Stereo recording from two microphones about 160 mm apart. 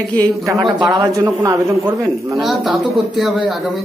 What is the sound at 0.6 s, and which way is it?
A man's voice, 30° right (ahead or behind).